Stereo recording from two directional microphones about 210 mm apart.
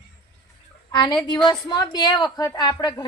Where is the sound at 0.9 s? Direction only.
20° left (ahead or behind).